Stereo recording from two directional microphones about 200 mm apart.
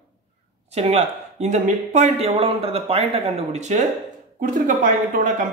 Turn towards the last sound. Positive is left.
turn(degrees=-40)  # may be behind; listen again after turning